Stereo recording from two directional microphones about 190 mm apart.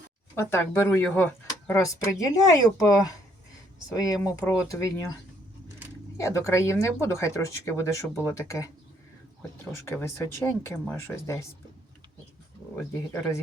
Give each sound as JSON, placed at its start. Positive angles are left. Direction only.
{"t": 0.3, "sound": "speech", "side_deg": 10}
{"t": 3.9, "sound": "speech", "side_deg": 20}
{"t": 6.2, "sound": "speech", "side_deg": 15}
{"t": 9.9, "sound": "speech", "side_deg": 10}
{"t": 12.7, "sound": "speech", "side_deg": 15}